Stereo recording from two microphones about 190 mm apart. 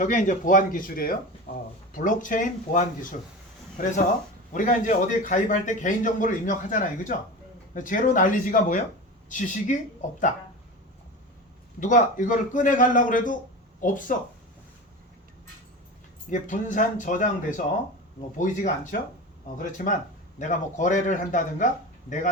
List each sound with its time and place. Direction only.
0.0 s a man's voice: 40° left (ahead or behind)
1.5 s a sound: 50° left (ahead or behind)
1.9 s a man's voice: 45° left (ahead or behind)
11.8 s a man's voice: 40° left (ahead or behind)
16.3 s a man's voice: 40° left (ahead or behind)
18.3 s a man's voice: 40° left (ahead or behind)